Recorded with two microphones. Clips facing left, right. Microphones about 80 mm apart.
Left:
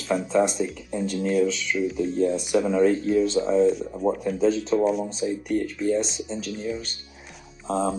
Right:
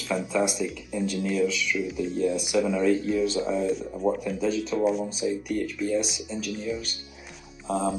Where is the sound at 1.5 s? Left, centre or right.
Right.